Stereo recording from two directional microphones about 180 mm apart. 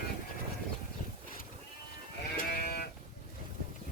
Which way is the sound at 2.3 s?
60° left (ahead or behind).